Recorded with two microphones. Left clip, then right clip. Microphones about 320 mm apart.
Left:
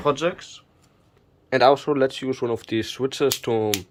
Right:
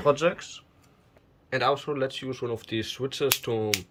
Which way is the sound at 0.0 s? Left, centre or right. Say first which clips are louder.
Left 1 dB; centre.